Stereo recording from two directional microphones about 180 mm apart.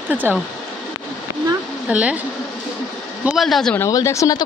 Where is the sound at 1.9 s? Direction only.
5° right (ahead or behind).